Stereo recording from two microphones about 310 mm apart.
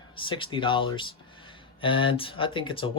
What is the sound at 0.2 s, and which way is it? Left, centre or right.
Speech, centre.